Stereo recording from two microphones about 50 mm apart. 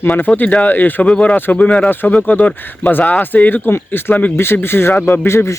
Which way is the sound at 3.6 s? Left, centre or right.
Left.